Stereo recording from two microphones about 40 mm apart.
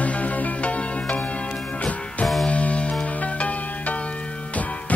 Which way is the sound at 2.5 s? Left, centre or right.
Left.